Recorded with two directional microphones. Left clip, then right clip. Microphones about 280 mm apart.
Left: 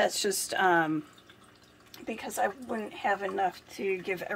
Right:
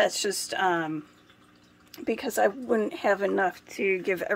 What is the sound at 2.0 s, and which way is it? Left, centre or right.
Speech, centre.